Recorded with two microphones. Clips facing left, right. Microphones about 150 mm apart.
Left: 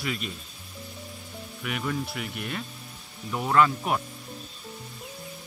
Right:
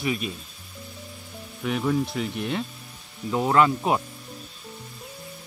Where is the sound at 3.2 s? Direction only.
20° right (ahead or behind).